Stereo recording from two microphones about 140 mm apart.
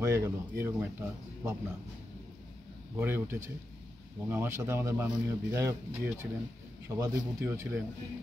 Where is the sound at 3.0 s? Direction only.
15° right (ahead or behind).